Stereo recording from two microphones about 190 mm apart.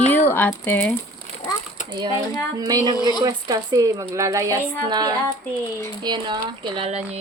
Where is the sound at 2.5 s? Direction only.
20° right (ahead or behind).